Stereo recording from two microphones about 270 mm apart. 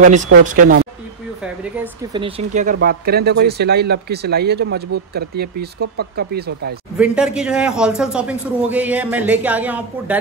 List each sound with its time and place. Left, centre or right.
0.4 s speech: right
2.1 s speech: right
7.0 s a man's voice: centre